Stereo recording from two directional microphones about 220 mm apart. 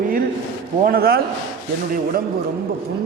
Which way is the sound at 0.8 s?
40° right (ahead or behind).